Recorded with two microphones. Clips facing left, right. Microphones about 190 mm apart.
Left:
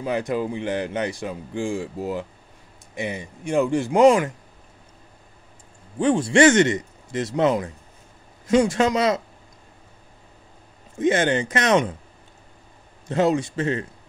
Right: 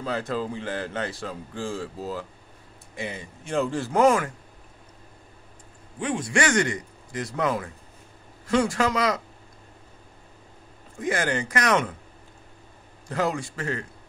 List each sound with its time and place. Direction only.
0.0 s speech: 15° left (ahead or behind)
5.9 s a man's voice: 30° left (ahead or behind)
11.0 s a man's voice: 25° left (ahead or behind)
13.1 s a man's voice: 20° left (ahead or behind)